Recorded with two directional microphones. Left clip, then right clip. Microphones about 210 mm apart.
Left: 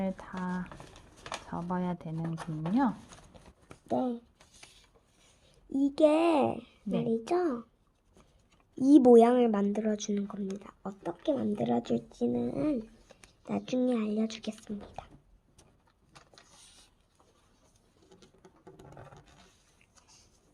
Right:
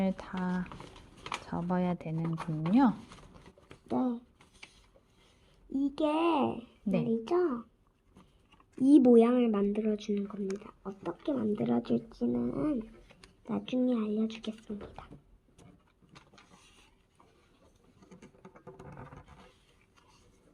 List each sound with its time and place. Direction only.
0.0 s speech: 10° right (ahead or behind)
2.2 s speech: 35° left (ahead or behind)
3.8 s speech: 35° left (ahead or behind)
5.7 s speech: 45° left (ahead or behind)
8.9 s speech: 40° left (ahead or behind)